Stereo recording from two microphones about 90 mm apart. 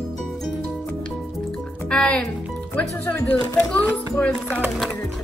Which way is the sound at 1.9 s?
10° left (ahead or behind).